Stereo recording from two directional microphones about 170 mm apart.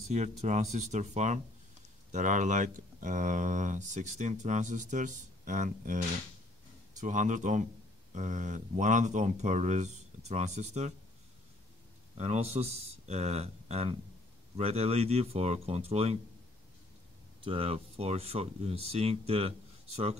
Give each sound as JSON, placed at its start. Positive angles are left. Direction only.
{"t": 0.4, "sound": "speech", "side_deg": -40}
{"t": 12.2, "sound": "speech", "side_deg": -40}
{"t": 17.4, "sound": "speech", "side_deg": -35}